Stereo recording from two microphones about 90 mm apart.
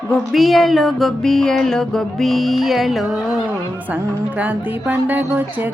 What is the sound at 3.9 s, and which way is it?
Music, 15° right (ahead or behind).